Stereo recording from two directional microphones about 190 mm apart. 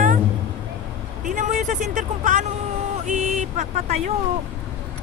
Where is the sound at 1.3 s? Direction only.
40° right (ahead or behind).